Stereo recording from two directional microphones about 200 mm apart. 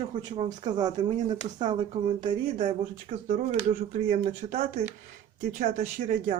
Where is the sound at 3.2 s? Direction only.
40° right (ahead or behind).